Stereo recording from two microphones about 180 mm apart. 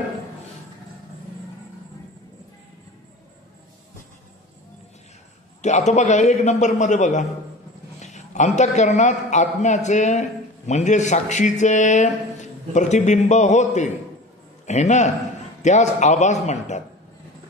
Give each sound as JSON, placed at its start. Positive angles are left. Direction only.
{"t": 5.6, "sound": "speech", "side_deg": 40}